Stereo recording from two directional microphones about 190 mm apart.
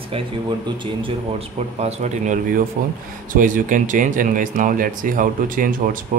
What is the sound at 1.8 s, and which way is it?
Speech, 35° right (ahead or behind).